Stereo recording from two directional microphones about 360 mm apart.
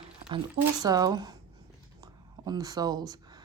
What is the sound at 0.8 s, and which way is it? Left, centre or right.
Speech, centre.